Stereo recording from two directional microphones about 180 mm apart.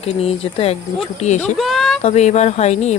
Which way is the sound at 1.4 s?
Centre (ahead or behind).